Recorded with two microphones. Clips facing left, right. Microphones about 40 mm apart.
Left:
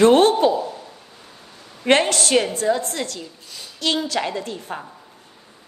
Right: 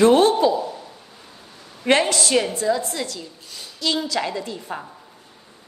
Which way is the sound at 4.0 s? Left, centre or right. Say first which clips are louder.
Left 1 dB; left.